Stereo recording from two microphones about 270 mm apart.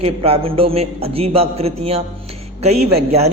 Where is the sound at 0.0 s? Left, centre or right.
Right.